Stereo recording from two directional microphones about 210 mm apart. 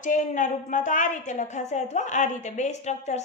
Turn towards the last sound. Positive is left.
turn(degrees=35)  # may be behind; listen again after turning